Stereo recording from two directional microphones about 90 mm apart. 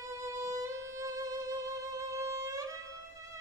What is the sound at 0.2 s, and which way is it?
Music, 35° right (ahead or behind).